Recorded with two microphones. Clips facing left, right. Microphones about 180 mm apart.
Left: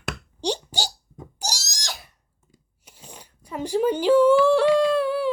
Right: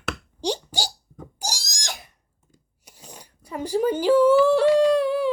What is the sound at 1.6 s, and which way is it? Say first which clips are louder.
Pig: right 1 dB; 50° right (ahead or behind).